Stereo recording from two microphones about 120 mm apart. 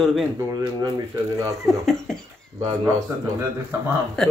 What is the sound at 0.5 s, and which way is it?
Speech, 35° right (ahead or behind).